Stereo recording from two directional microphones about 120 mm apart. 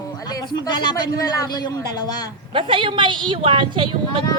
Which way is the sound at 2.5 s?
45° right (ahead or behind).